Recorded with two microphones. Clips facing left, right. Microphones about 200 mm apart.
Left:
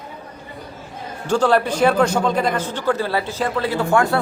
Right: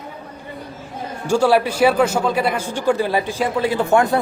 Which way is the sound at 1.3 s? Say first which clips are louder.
Right 1 dB; 10° right (ahead or behind).